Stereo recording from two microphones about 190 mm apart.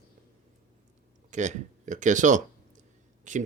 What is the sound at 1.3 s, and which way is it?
Speech, 40° right (ahead or behind).